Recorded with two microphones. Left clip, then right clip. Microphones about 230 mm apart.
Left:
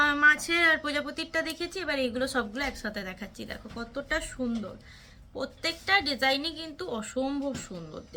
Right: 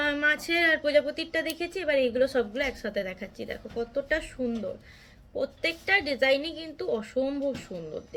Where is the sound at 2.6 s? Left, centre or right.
Left.